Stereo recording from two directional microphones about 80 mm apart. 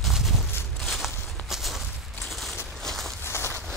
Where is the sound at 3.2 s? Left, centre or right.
Left.